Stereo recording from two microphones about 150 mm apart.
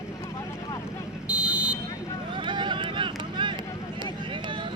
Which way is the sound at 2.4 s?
30° right (ahead or behind).